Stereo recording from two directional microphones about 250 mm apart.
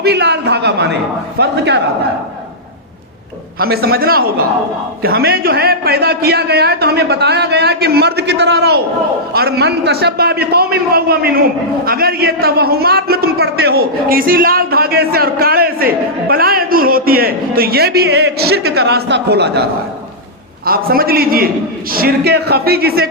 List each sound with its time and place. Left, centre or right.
0.0 s a sound: right
1.4 s a man's voice: right
3.6 s a man's voice: right
20.7 s a man's voice: right